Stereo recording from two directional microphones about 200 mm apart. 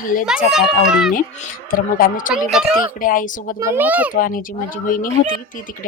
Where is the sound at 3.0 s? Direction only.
45° left (ahead or behind).